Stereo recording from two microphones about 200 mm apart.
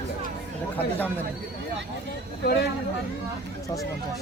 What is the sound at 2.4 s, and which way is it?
Speech, 50° left (ahead or behind).